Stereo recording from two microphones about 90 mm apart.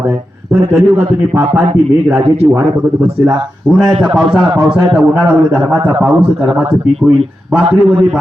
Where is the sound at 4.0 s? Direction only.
5° right (ahead or behind).